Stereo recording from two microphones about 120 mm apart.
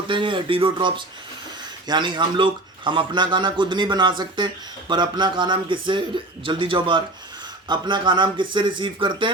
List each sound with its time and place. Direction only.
0.1 s a man's voice: 45° right (ahead or behind)